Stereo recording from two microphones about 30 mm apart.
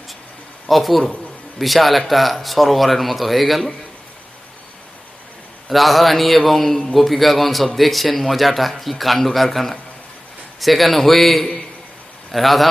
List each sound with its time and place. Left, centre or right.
0.7 s speech: centre
5.7 s speech: centre